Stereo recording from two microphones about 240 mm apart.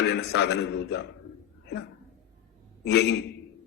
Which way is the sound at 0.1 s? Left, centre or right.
Left.